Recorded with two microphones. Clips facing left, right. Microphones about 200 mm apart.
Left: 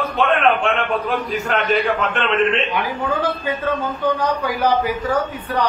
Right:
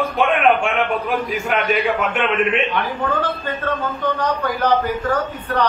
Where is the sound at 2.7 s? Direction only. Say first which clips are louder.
Even; 10° left (ahead or behind).